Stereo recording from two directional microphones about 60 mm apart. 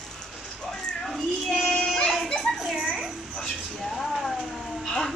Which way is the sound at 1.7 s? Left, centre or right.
Centre.